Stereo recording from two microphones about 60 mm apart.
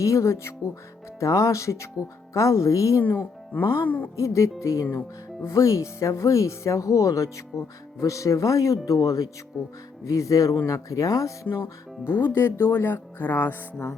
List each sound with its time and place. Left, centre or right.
0.0 s speech: left
3.0 s a woman's voice: left
4.2 s speech: left
4.9 s speech: left
9.5 s speech: centre
10.0 s speech: left
11.5 s speech: left
12.1 s speech: left